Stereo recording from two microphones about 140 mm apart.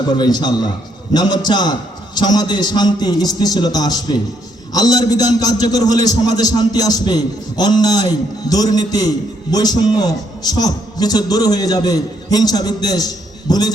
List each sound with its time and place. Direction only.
0.2 s a man's voice: 30° left (ahead or behind)